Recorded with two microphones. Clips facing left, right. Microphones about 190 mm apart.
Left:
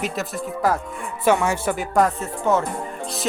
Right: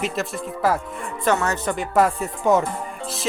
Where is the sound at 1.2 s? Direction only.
10° left (ahead or behind).